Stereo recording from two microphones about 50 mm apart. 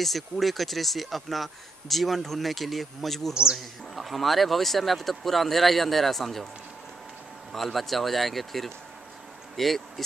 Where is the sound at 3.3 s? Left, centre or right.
Centre.